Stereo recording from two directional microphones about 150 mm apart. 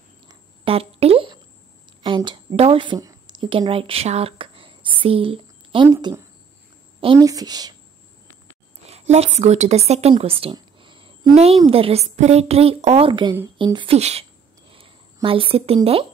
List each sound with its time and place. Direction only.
0.7 s a sound: 40° right (ahead or behind)
2.0 s a woman's voice: 30° right (ahead or behind)
7.2 s speech: 25° right (ahead or behind)
8.8 s a woman's voice: 45° right (ahead or behind)
15.2 s a woman's voice: 35° right (ahead or behind)